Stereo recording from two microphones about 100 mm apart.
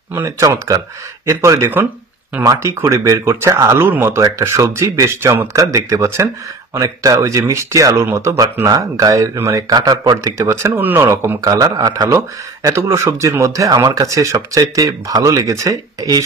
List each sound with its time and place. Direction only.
0.1 s speech: 35° right (ahead or behind)
11.1 s speech: 35° right (ahead or behind)